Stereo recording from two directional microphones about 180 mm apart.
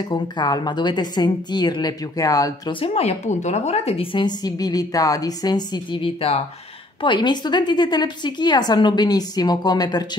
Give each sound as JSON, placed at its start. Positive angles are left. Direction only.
{"t": 0.1, "sound": "a woman's voice", "side_deg": 25}
{"t": 2.8, "sound": "a woman's voice", "side_deg": 35}